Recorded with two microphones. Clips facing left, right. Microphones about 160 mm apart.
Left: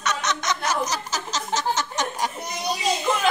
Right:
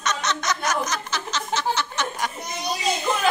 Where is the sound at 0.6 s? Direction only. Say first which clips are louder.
Left 1 dB; 35° left (ahead or behind).